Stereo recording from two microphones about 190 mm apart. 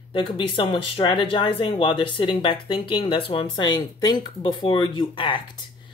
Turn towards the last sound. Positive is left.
turn(degrees=25)  # may be behind; listen again after turning